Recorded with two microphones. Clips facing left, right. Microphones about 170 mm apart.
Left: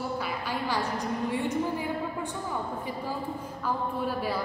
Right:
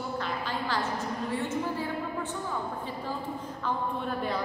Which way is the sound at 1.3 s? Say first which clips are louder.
Left 2 dB; 15° left (ahead or behind).